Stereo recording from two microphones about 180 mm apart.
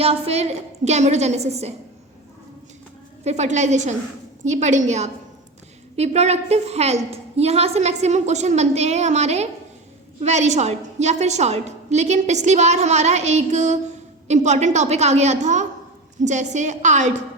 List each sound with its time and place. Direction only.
0.0 s a woman's voice: 35° right (ahead or behind)
3.2 s a woman's voice: 40° right (ahead or behind)